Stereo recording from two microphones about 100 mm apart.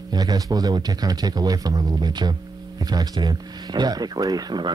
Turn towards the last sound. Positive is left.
turn(degrees=-40)  # may be behind; listen again after turning